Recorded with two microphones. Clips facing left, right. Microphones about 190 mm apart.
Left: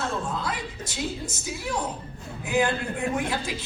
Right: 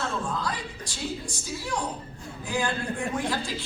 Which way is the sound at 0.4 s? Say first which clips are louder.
Left 1 dB; 20° left (ahead or behind).